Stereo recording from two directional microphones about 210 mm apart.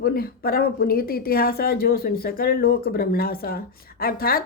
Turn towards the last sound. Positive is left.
turn(degrees=45)  # may be behind; listen again after turning